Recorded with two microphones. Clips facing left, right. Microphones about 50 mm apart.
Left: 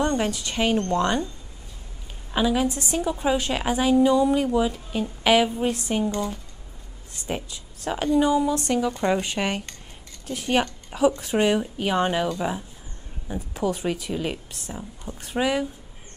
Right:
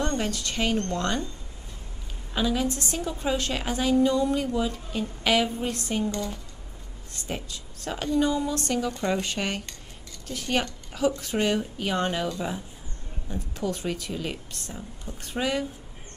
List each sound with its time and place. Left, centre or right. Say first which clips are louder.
0.0 s a woman's voice: left 4 dB; centre
2.3 s a woman's voice: left 4 dB; centre